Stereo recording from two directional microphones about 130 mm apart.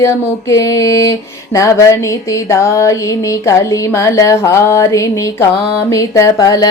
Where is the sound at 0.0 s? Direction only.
20° left (ahead or behind).